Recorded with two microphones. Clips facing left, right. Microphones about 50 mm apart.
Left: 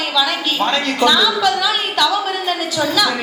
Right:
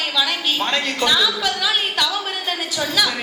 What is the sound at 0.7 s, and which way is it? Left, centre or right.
A woman's voice, left.